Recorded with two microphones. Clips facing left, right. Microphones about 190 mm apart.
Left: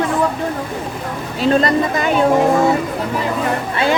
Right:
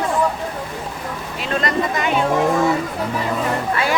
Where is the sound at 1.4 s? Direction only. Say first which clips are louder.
Left 7 dB; 35° left (ahead or behind).